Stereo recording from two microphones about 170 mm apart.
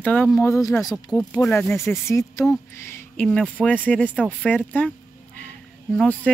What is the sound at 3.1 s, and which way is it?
Speech, 5° left (ahead or behind).